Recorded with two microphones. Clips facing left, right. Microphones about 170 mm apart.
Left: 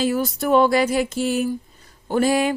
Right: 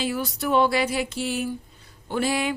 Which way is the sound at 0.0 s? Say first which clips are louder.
Left 6 dB; 45° left (ahead or behind).